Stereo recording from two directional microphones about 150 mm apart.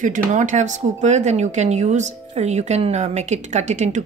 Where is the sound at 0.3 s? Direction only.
55° right (ahead or behind).